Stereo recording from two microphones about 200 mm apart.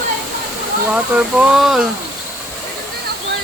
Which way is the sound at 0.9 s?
5° right (ahead or behind).